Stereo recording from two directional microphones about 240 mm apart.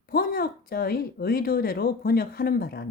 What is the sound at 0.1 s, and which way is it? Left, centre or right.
Speech, left.